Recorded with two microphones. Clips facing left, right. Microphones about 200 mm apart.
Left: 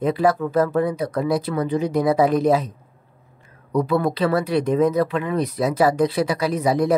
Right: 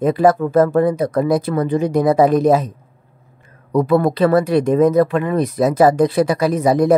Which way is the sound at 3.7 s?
50° right (ahead or behind).